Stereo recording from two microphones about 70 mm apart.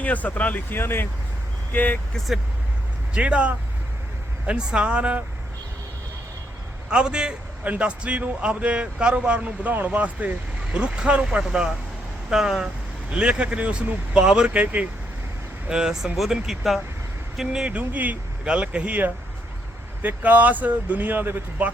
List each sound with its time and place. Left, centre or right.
0.0 s speech: left
2.1 s speech: centre
3.2 s speech: centre
6.9 s a man's voice: centre
12.6 s speech: centre
15.7 s speech: centre; by 21.7 s right